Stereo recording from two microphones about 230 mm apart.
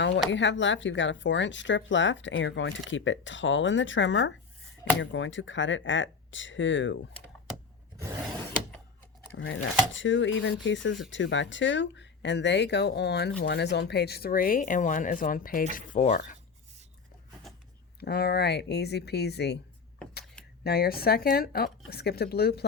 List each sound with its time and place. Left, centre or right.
0.3 s speech: left
9.3 s speech: left
18.0 s speech: left
20.7 s speech: left